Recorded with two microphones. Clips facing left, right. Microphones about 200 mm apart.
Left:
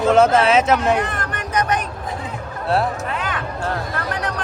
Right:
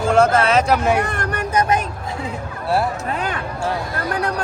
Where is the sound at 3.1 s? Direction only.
40° right (ahead or behind).